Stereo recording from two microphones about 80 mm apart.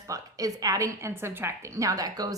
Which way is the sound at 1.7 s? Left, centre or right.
Right.